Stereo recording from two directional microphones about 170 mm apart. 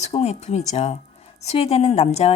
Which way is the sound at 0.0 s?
40° left (ahead or behind).